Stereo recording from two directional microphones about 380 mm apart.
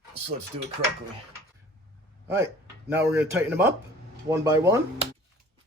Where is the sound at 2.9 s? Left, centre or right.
Centre.